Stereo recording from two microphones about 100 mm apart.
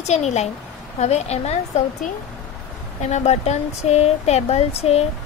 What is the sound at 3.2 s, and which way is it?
A woman's voice, 90° left.